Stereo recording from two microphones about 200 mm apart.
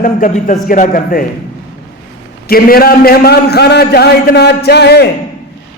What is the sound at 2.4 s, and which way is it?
A man's voice, 50° left (ahead or behind).